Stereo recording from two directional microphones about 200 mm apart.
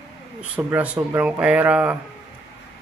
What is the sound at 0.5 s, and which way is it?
Speech, 5° right (ahead or behind).